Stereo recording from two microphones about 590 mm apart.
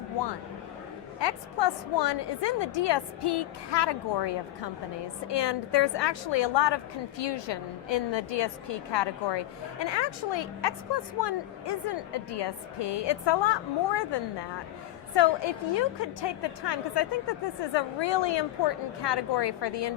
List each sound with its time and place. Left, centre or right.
1.2 s a woman's voice: left